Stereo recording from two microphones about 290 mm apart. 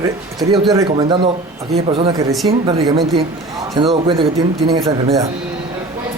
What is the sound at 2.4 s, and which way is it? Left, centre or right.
Speech, centre.